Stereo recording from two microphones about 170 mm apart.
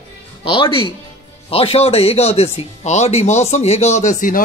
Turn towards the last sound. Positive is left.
turn(degrees=50)  # may be behind; listen again after turning